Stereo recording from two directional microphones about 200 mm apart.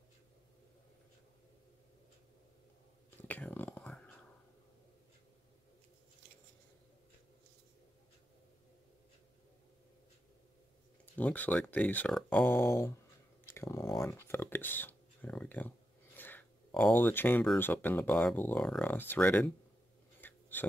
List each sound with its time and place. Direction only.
3.2 s whispering: 10° left (ahead or behind)
11.1 s speech: 10° left (ahead or behind)
20.2 s a sound: 10° left (ahead or behind)